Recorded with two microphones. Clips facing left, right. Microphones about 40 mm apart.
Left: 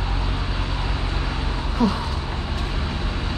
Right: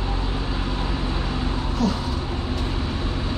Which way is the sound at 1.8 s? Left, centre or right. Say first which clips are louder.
Left 3 dB; centre.